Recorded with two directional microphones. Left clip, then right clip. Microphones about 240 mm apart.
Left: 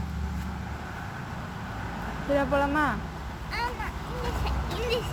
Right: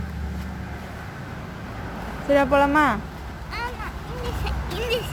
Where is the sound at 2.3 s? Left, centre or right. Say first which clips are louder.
Right 7 dB; right.